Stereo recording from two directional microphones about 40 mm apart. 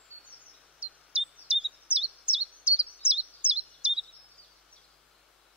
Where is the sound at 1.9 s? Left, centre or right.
Left.